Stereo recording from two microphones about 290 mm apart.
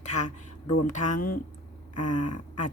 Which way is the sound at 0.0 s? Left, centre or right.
Left.